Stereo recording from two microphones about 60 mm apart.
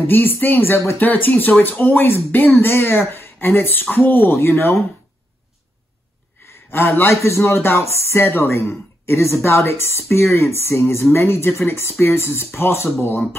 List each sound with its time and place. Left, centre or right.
0.0 s speech: left
0.9 s speech: left
6.7 s speech: left